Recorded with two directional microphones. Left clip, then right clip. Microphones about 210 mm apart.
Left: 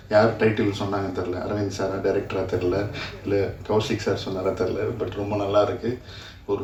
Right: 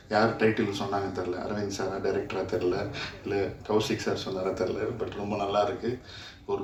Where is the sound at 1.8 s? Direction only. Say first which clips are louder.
Left 6 dB; 55° right (ahead or behind).